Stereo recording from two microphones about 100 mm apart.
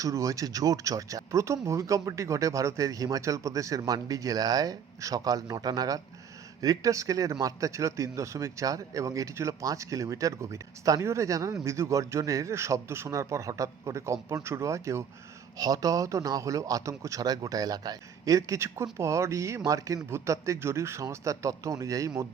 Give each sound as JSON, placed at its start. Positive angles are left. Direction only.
{"t": 0.0, "sound": "speech", "side_deg": -35}